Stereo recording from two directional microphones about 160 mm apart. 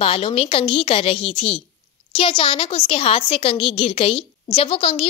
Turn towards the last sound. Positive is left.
turn(degrees=35)  # may be behind; listen again after turning